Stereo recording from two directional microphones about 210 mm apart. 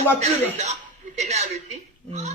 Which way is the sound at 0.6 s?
30° right (ahead or behind).